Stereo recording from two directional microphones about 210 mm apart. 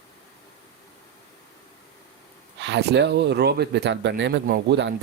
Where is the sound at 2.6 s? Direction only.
55° right (ahead or behind).